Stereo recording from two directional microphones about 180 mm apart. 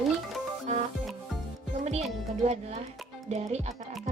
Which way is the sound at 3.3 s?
35° right (ahead or behind).